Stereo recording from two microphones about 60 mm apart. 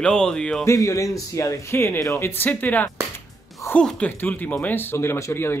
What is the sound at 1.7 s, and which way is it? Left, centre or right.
Speech, left.